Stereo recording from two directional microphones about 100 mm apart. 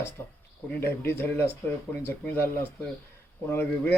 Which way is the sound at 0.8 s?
20° left (ahead or behind).